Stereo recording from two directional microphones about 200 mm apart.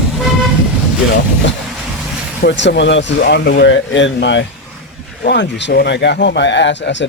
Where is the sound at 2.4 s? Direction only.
60° left (ahead or behind).